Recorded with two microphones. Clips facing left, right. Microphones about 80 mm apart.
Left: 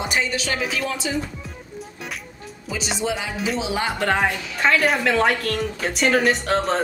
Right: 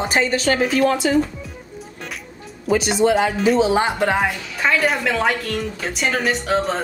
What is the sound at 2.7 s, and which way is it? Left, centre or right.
Speech, right.